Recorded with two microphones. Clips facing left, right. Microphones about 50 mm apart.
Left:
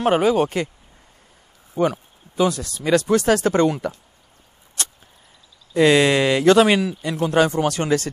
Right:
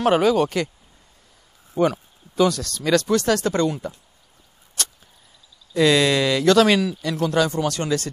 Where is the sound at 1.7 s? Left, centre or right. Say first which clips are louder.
Even; centre.